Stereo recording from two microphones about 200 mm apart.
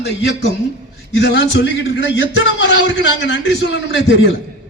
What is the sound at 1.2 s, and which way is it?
A man's voice, 60° left (ahead or behind).